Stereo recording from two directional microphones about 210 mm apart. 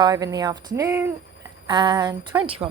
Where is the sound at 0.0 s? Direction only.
20° right (ahead or behind).